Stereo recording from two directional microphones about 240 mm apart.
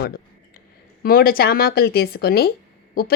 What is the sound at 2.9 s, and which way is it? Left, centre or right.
Owl, left.